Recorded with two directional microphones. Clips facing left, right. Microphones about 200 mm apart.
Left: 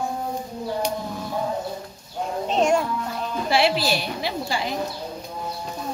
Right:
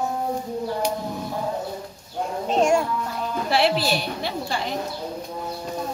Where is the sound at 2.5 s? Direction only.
10° right (ahead or behind).